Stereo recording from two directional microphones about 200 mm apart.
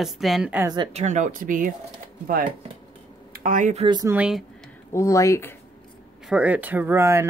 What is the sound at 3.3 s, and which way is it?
Speech, 45° right (ahead or behind).